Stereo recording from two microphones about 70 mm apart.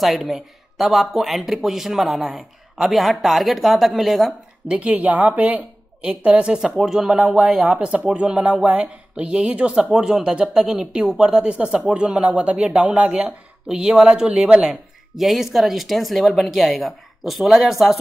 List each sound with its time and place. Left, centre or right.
0.0 s speech: centre
4.6 s a woman's voice: centre
7.8 s speech: centre
9.8 s speech: centre
14.7 s speech: centre